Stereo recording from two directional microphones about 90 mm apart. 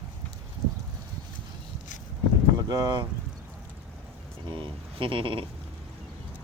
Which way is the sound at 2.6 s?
50° right (ahead or behind).